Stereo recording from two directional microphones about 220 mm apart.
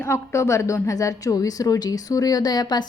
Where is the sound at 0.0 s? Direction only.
10° left (ahead or behind).